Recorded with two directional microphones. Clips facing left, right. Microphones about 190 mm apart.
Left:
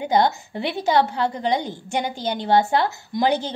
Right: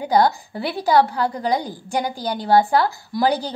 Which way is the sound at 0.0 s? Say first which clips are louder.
Right 2 dB; 25° left (ahead or behind).